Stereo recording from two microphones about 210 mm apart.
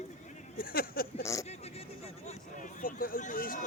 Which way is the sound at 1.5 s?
30° left (ahead or behind).